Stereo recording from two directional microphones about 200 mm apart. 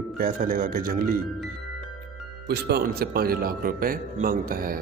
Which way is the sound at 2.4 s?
55° right (ahead or behind).